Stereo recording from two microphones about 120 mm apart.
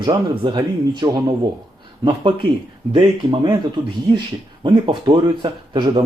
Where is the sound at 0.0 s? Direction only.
40° right (ahead or behind).